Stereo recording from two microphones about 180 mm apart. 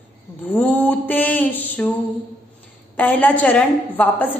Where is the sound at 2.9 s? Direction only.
10° left (ahead or behind).